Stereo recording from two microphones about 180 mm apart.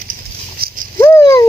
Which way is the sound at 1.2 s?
20° left (ahead or behind).